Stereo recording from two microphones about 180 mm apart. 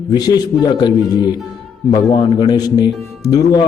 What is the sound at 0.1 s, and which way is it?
A man's voice, 20° left (ahead or behind).